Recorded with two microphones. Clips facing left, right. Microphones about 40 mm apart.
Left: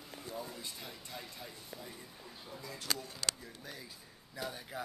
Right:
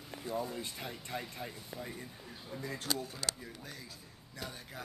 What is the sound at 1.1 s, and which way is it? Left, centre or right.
Speech, centre.